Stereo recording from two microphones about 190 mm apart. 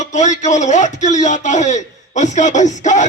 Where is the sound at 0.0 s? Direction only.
40° left (ahead or behind).